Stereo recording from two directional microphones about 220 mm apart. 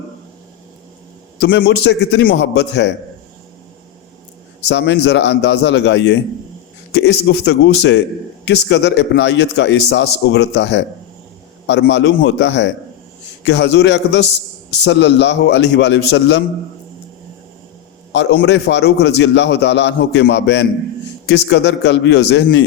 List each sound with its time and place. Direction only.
1.4 s a man's voice: 50° left (ahead or behind)
4.6 s a man's voice: 50° left (ahead or behind)
18.1 s a man's voice: 50° left (ahead or behind)